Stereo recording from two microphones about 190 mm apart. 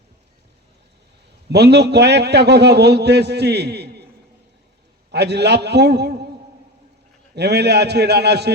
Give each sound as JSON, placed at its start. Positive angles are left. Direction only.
{"t": 1.5, "sound": "a man's voice", "side_deg": -60}
{"t": 5.1, "sound": "a man's voice", "side_deg": -60}
{"t": 7.3, "sound": "a man's voice", "side_deg": -60}